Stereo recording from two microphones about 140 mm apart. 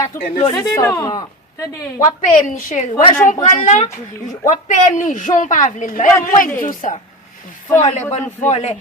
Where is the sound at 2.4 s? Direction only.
70° left (ahead or behind).